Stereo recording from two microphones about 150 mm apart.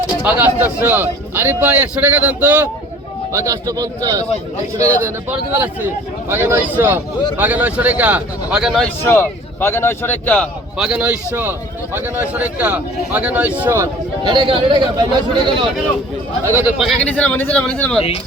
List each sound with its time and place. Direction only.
0.2 s speech: 10° right (ahead or behind)
3.3 s a man's voice: 20° right (ahead or behind); by 8.8 s 5° right (ahead or behind)
9.0 s a man's voice: 15° left (ahead or behind)
10.8 s speech: 5° right (ahead or behind)
14.3 s speech: 30° right (ahead or behind)
16.7 s speech: 5° right (ahead or behind)
17.0 s a man's voice: 10° left (ahead or behind)